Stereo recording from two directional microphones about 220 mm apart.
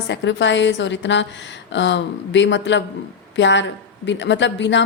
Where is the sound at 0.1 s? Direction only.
55° left (ahead or behind).